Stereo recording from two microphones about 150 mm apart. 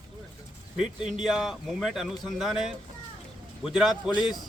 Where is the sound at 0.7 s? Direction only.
5° right (ahead or behind).